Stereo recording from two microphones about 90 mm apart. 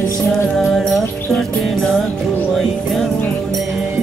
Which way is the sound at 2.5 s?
Centre (ahead or behind).